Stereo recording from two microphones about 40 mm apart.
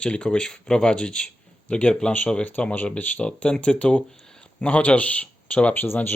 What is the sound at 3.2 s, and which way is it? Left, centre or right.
Speech, left.